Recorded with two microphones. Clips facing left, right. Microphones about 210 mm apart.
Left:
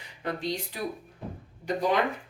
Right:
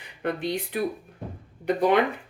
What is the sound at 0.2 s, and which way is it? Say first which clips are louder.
A woman's voice: right 4 dB; 60° right (ahead or behind).